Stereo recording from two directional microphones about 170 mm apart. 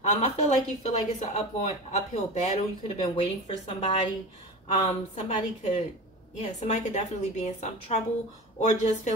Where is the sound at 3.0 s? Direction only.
35° left (ahead or behind).